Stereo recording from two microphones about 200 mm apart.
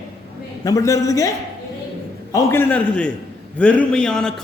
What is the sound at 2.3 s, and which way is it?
A man's voice, 10° left (ahead or behind).